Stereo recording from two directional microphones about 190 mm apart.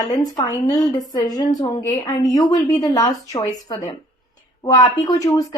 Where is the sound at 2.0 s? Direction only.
20° left (ahead or behind).